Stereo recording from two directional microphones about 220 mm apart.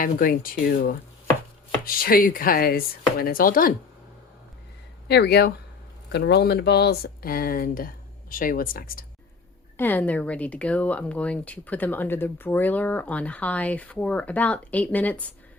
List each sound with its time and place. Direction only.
0.0 s speech: 40° left (ahead or behind)
5.0 s speech: 50° left (ahead or behind)
9.7 s speech: 10° left (ahead or behind)